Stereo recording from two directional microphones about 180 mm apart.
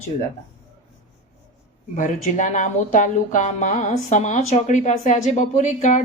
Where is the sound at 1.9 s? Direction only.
45° left (ahead or behind).